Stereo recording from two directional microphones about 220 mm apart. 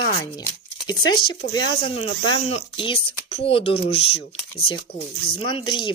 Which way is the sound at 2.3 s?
25° left (ahead or behind).